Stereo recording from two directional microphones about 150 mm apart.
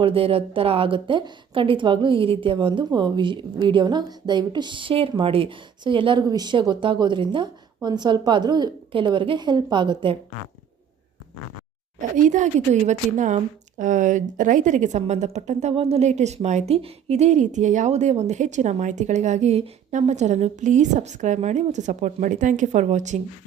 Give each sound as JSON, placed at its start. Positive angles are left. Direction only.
{"t": 0.0, "sound": "a woman's voice", "side_deg": -40}
{"t": 11.9, "sound": "a woman's voice", "side_deg": -55}
{"t": 15.7, "sound": "a woman's voice", "side_deg": -40}